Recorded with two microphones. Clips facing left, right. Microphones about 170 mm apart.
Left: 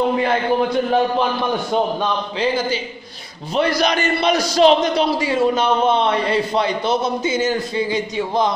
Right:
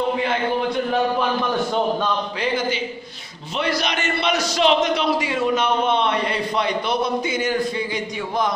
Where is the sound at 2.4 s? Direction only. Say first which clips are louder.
Left 4 dB; 30° left (ahead or behind).